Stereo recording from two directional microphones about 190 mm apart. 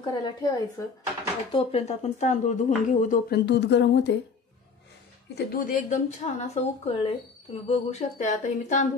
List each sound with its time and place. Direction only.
0.0 s a woman's voice: 20° left (ahead or behind)
1.5 s speech: 35° left (ahead or behind); by 4.1 s 65° left (ahead or behind)
5.3 s a woman's voice: 50° left (ahead or behind)